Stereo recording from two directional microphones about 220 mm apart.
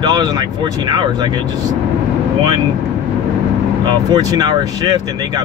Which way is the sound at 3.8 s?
20° right (ahead or behind).